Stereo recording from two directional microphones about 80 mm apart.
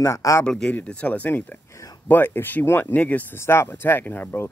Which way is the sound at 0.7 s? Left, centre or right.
Centre.